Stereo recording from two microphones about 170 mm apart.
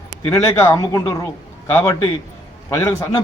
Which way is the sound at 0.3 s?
15° left (ahead or behind).